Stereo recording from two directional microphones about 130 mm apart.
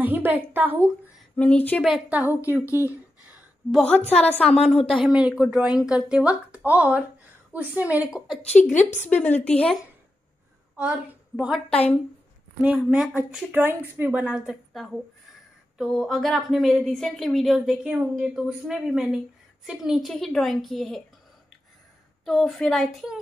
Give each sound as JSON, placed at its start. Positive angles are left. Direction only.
{"t": 0.0, "sound": "a woman's voice", "side_deg": -15}
{"t": 1.3, "sound": "speech", "side_deg": 10}
{"t": 1.9, "sound": "speech", "side_deg": -5}
{"t": 2.7, "sound": "a sound", "side_deg": -15}
{"t": 4.0, "sound": "a woman's voice", "side_deg": 55}
{"t": 4.3, "sound": "a woman's voice", "side_deg": 5}
{"t": 8.4, "sound": "a woman's voice", "side_deg": 60}
{"t": 9.1, "sound": "speech", "side_deg": 15}
{"t": 10.8, "sound": "a woman's voice", "side_deg": -10}
{"t": 12.6, "sound": "a woman's voice", "side_deg": -5}
{"t": 22.2, "sound": "a woman's voice", "side_deg": 0}